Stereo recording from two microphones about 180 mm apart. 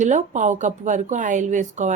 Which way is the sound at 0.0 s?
40° right (ahead or behind).